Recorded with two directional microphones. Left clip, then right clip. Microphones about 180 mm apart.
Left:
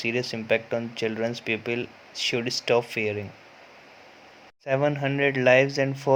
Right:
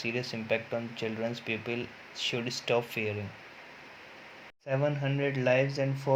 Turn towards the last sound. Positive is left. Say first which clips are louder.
# left 7 dB
turn(degrees=30)  # may be behind; listen again after turning